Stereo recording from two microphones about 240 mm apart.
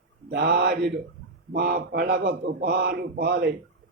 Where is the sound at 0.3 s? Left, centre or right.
Right.